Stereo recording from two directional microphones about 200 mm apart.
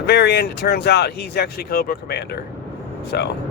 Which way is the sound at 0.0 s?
55° left (ahead or behind).